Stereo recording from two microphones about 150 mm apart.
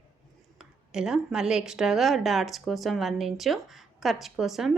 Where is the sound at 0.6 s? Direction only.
5° right (ahead or behind).